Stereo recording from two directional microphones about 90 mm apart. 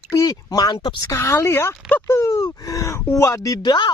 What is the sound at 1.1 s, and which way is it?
Speech, 25° left (ahead or behind).